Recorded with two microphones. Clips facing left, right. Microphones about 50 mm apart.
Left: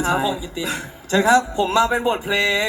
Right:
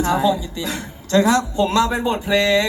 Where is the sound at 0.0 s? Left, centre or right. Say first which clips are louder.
Right 3 dB; centre.